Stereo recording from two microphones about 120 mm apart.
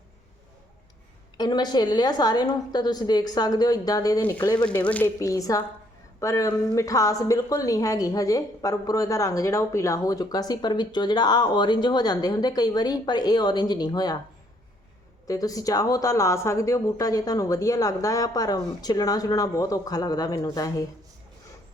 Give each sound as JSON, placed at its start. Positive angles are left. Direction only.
{"t": 1.4, "sound": "a woman's voice", "side_deg": 35}
{"t": 4.6, "sound": "speech", "side_deg": 10}
{"t": 5.2, "sound": "a woman's voice", "side_deg": 30}
{"t": 15.3, "sound": "speech", "side_deg": 30}